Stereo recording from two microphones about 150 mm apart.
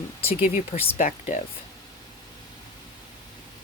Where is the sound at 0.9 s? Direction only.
55° left (ahead or behind).